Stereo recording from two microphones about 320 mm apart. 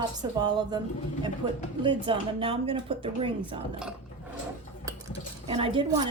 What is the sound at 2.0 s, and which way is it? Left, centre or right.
A woman's voice, centre.